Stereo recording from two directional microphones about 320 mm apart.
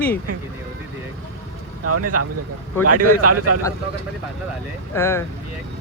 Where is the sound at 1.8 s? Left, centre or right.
Right.